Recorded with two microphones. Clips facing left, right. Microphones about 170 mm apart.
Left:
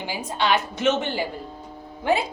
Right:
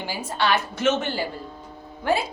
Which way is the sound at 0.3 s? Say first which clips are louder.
Left 1 dB; 15° left (ahead or behind).